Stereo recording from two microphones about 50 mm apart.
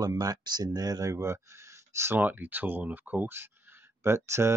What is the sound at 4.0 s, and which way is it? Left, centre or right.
Speech, right.